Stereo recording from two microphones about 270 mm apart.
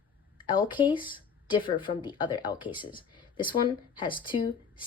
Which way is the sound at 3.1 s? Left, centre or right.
Centre.